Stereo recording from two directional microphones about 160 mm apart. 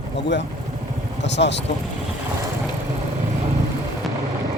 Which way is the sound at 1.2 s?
90° left.